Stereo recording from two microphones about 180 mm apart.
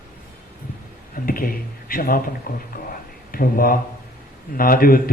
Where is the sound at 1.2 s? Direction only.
55° left (ahead or behind).